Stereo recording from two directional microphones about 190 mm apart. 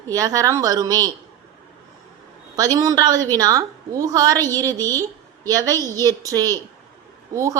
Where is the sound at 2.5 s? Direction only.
20° right (ahead or behind).